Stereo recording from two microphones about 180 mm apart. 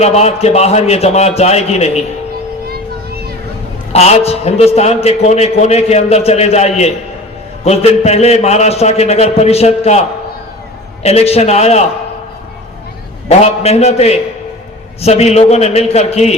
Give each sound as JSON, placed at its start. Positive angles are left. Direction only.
{"t": 0.0, "sound": "a man's voice", "side_deg": 35}
{"t": 3.9, "sound": "a man's voice", "side_deg": 35}
{"t": 11.0, "sound": "a man's voice", "side_deg": 35}
{"t": 13.2, "sound": "a man's voice", "side_deg": 35}